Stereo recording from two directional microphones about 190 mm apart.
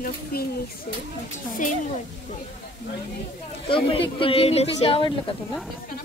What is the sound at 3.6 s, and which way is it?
Speech, 30° left (ahead or behind).